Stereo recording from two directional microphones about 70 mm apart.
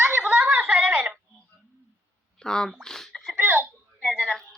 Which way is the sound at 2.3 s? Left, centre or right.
Centre.